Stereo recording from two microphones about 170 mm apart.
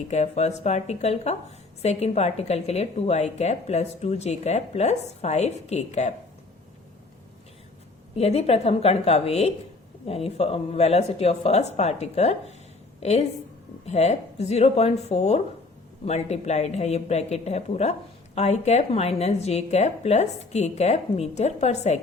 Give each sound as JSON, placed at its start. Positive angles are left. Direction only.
{"t": 0.1, "sound": "a woman's voice", "side_deg": 40}
{"t": 8.1, "sound": "a woman's voice", "side_deg": 35}